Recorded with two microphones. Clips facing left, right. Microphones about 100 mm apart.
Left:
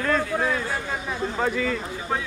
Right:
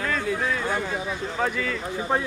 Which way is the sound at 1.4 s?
5° left (ahead or behind).